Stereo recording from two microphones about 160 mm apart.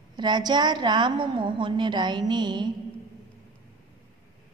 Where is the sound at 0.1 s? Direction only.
25° right (ahead or behind).